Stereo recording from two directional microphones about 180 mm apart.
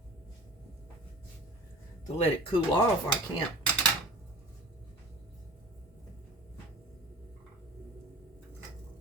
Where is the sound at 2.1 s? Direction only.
35° left (ahead or behind).